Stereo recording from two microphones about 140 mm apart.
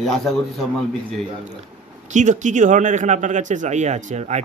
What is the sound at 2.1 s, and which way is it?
Speech, 60° right (ahead or behind).